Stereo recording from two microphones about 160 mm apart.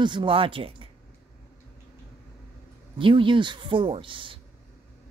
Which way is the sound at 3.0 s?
30° right (ahead or behind).